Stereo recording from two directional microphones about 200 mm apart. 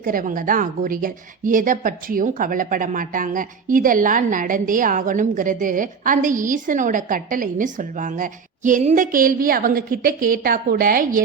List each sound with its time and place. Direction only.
0.0 s a woman's voice: 45° right (ahead or behind)